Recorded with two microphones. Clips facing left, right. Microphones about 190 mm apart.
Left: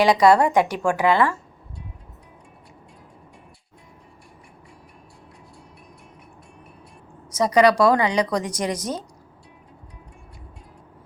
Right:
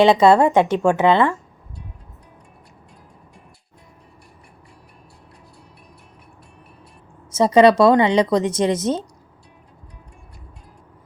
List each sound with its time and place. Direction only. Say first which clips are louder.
0.0 s speech: right 3 dB; 25° right (ahead or behind)
7.3 s speech: right 4 dB; 25° right (ahead or behind)